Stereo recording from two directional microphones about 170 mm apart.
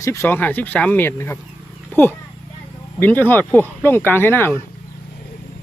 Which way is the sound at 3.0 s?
10° left (ahead or behind).